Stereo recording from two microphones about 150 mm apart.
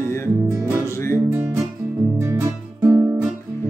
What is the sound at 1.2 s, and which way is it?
Music, 10° right (ahead or behind).